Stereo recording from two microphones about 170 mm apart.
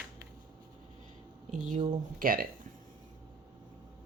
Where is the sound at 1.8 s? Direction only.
55° right (ahead or behind).